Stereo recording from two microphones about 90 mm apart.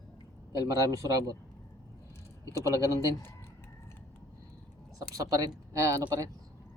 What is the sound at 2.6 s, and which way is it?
Speech, 35° right (ahead or behind).